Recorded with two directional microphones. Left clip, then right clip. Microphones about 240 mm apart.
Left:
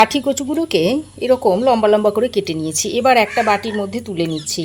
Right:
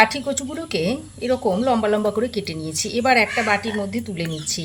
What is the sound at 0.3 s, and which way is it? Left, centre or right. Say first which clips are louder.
Speech: left 8 dB; left.